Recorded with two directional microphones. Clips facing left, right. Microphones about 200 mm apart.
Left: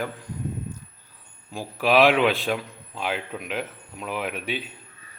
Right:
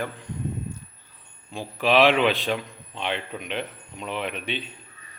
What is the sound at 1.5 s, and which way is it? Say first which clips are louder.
A man's voice: even; 5° left (ahead or behind).